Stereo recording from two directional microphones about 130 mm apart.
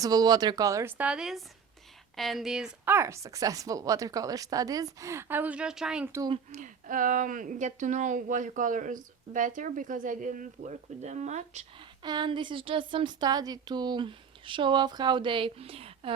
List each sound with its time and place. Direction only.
0.0 s speech: 30° right (ahead or behind)
0.9 s speech: 10° right (ahead or behind)
2.8 s speech: 20° right (ahead or behind)
6.5 s speech: 80° right; by 11.6 s 65° right (ahead or behind)
11.8 s speech: 35° right (ahead or behind)